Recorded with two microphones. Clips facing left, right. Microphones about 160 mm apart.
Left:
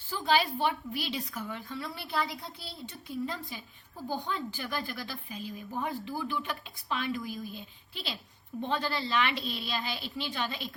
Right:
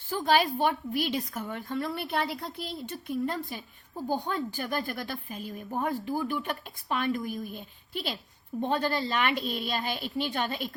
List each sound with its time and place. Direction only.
0.1 s a woman's voice: 50° right (ahead or behind)
3.9 s a woman's voice: 45° right (ahead or behind)